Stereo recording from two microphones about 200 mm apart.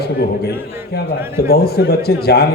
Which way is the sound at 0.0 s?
55° left (ahead or behind).